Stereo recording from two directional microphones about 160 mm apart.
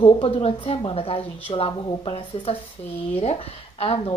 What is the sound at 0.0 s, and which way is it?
A woman's voice, 35° left (ahead or behind).